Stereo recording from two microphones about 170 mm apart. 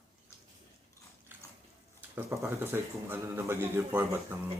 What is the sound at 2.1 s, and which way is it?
Speech, 15° right (ahead or behind).